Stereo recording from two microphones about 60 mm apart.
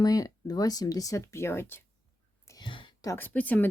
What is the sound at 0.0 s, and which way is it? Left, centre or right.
Speech, left.